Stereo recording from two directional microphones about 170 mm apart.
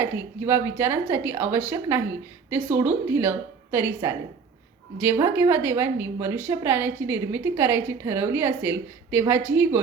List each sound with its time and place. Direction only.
0.0 s a woman's voice: 15° right (ahead or behind)
5.1 s a woman's voice: 15° right (ahead or behind)